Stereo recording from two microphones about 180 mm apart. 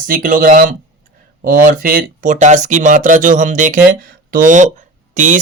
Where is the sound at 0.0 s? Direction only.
50° right (ahead or behind).